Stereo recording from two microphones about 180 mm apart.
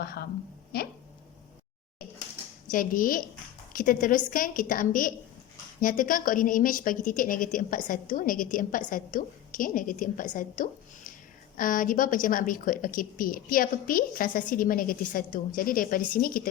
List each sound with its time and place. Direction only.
0.0 s a woman's voice: 60° left (ahead or behind)
0.7 s a sound: 60° left (ahead or behind)
2.6 s a woman's voice: 50° left (ahead or behind)